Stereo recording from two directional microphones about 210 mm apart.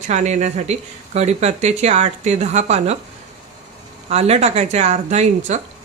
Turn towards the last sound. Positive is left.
turn(degrees=-35)  # may be behind; listen again after turning